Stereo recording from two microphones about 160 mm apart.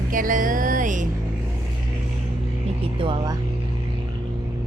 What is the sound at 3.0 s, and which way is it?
Speech, 30° right (ahead or behind).